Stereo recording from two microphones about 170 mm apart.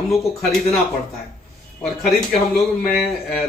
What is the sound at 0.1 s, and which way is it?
Speech, centre (ahead or behind).